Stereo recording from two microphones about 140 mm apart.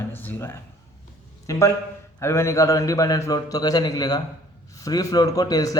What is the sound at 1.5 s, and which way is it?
A man's voice, 20° left (ahead or behind).